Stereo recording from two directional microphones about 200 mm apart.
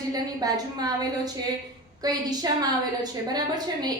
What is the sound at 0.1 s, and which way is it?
A woman's voice, 20° right (ahead or behind).